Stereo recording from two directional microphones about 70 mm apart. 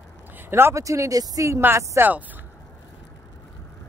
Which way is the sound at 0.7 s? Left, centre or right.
Right.